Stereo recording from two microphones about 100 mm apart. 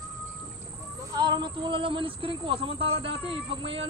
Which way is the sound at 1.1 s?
45° right (ahead or behind).